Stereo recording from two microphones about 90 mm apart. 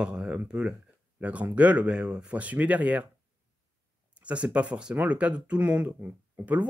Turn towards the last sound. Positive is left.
turn(degrees=-15)  # may be behind; listen again after turning